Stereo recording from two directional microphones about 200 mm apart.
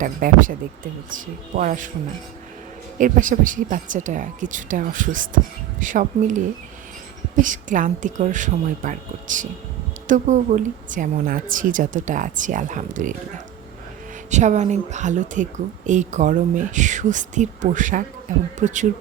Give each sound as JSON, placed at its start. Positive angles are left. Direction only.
{"t": 0.0, "sound": "speech", "side_deg": -40}
{"t": 1.5, "sound": "speech", "side_deg": -40}
{"t": 3.0, "sound": "speech", "side_deg": -40}
{"t": 14.3, "sound": "speech", "side_deg": -35}